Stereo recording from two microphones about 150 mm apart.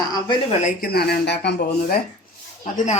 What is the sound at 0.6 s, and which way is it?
Speech, 80° left.